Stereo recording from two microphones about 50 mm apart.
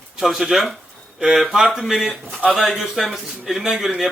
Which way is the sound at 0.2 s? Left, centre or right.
Centre.